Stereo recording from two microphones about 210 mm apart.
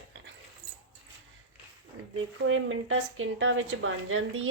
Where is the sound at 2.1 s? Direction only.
70° right (ahead or behind).